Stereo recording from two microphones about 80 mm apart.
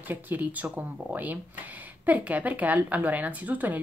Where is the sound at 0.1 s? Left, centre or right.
Right.